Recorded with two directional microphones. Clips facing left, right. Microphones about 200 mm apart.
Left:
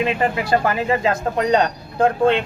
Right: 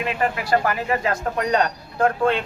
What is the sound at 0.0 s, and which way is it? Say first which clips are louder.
Speech: left 4 dB; 25° left (ahead or behind).